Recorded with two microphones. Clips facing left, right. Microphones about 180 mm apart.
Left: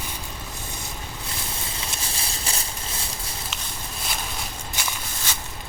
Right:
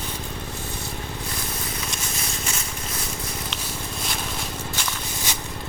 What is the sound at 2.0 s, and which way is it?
Patter, 30° left (ahead or behind).